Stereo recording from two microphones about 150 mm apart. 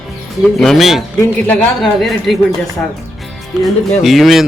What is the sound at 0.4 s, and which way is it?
Speech, centre (ahead or behind).